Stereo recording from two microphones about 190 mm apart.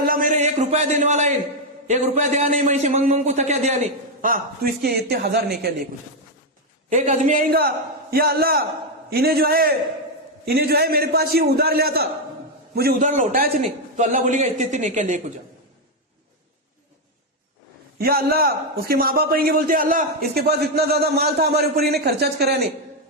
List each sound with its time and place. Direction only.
0.0 s a man's voice: 45° right (ahead or behind)
4.2 s a man's voice: 50° right (ahead or behind)
6.9 s a man's voice: 40° right (ahead or behind)
13.0 s a man's voice: 40° right (ahead or behind)
17.9 s a man's voice: 50° right (ahead or behind)